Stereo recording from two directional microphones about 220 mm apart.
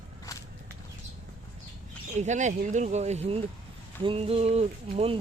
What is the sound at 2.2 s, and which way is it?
Speech, 35° right (ahead or behind).